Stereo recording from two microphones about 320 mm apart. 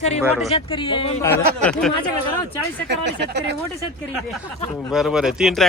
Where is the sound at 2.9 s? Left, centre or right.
Right.